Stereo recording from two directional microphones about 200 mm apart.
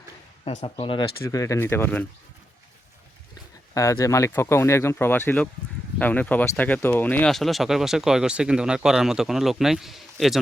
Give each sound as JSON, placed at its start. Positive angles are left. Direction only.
{"t": 0.4, "sound": "speech", "side_deg": 30}
{"t": 3.8, "sound": "speech", "side_deg": 15}